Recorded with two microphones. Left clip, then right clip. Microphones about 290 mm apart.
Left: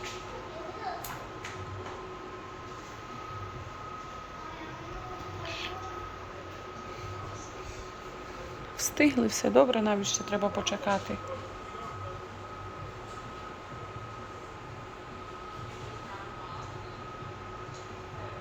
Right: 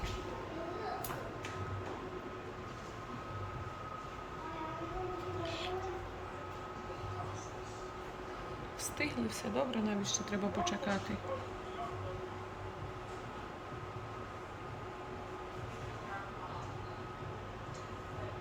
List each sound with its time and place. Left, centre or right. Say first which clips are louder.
5.5 s vehicle: left 6 dB; centre
8.8 s speech: left 12 dB; centre